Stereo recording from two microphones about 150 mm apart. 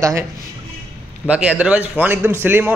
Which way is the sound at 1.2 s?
10° right (ahead or behind).